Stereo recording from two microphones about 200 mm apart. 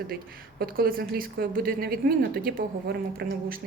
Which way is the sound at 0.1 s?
45° right (ahead or behind).